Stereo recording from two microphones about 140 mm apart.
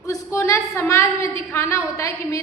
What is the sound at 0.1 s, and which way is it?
A woman's voice, 20° left (ahead or behind).